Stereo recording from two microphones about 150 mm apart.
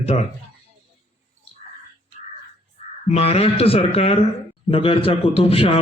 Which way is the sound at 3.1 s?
40° left (ahead or behind).